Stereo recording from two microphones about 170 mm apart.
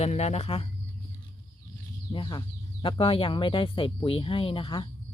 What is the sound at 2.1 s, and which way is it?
Speech, 30° left (ahead or behind).